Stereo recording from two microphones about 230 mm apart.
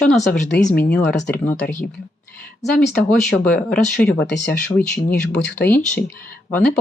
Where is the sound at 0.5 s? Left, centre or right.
Left.